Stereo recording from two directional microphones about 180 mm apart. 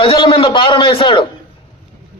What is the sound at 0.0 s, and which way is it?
A man's voice, 30° left (ahead or behind).